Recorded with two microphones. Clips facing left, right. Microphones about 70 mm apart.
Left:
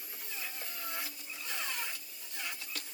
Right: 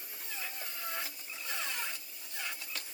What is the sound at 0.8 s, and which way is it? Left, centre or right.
Printer, right.